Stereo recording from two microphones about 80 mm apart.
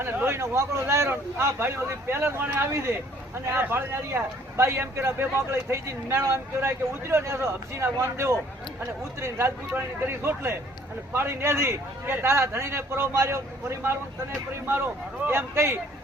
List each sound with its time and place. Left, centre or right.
0.0 s a sound: right
0.3 s a man's voice: right
15.3 s a man's voice: right